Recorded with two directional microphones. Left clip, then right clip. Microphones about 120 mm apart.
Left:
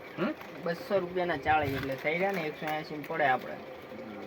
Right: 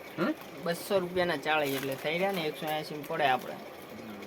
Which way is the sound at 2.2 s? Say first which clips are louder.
Even; 10° left (ahead or behind).